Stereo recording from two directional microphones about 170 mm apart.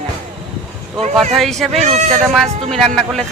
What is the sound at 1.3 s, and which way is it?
Speech, centre (ahead or behind).